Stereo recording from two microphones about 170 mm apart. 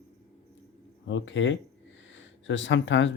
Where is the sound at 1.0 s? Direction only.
90° left.